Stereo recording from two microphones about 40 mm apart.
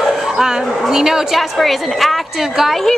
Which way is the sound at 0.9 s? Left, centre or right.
Centre.